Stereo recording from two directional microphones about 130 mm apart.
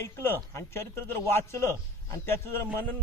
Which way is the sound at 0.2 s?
20° left (ahead or behind).